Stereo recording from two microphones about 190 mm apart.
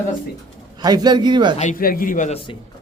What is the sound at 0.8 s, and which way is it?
Speech, 20° right (ahead or behind).